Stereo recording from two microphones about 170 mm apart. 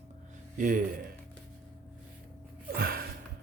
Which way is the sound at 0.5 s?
50° right (ahead or behind).